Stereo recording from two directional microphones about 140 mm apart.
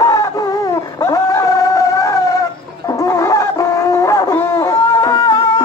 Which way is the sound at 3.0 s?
25° left (ahead or behind).